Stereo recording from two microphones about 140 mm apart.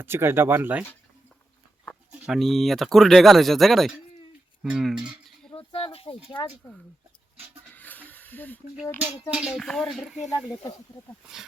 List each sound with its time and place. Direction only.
0.0 s speech: 15° right (ahead or behind)
2.2 s speech: centre (ahead or behind)
5.5 s a sound: 40° left (ahead or behind)
7.7 s snake: 10° left (ahead or behind)
9.3 s speech: 5° right (ahead or behind)